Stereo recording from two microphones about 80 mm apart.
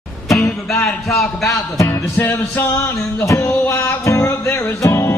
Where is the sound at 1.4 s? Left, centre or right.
Left.